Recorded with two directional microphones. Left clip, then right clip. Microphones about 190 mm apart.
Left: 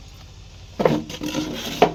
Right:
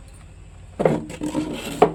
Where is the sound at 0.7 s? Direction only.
10° left (ahead or behind).